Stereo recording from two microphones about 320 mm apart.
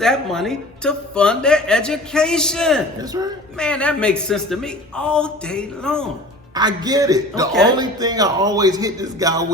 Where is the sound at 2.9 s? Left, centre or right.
Centre.